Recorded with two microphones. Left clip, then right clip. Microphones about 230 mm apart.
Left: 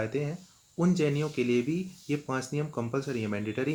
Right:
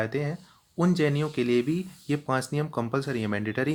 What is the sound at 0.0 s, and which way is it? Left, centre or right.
Speech, right.